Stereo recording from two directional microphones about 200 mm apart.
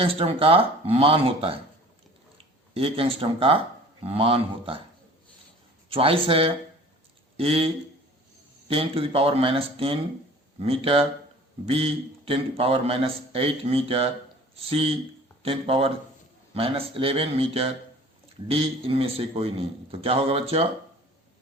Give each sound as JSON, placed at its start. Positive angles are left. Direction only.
{"t": 0.0, "sound": "a man's voice", "side_deg": -30}
{"t": 2.7, "sound": "a man's voice", "side_deg": -30}
{"t": 5.9, "sound": "a man's voice", "side_deg": -30}